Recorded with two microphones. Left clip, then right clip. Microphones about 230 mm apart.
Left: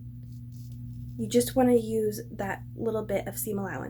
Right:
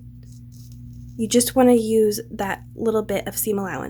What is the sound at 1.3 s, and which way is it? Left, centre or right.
A woman's voice, right.